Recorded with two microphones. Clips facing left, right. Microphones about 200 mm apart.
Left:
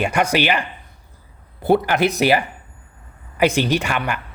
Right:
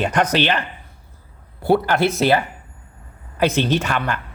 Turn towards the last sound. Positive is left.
turn(degrees=10)  # may be behind; listen again after turning